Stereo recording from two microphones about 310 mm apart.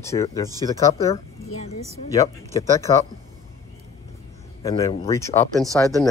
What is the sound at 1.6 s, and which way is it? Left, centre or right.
Speech, centre.